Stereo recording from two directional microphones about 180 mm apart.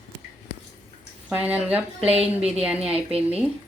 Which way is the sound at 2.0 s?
35° right (ahead or behind).